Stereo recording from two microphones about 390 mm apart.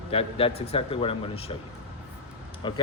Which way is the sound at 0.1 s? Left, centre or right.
Centre.